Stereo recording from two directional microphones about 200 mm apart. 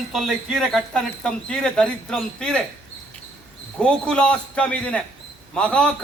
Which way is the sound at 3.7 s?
5° left (ahead or behind).